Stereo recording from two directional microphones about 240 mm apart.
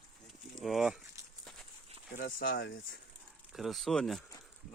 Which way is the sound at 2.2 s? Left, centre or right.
Left.